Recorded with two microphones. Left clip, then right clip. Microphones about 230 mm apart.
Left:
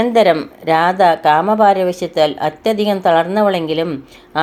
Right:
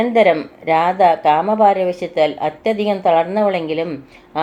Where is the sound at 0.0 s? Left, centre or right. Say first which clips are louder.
Left 1 dB; left.